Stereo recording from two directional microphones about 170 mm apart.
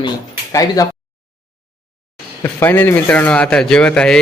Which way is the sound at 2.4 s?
10° left (ahead or behind).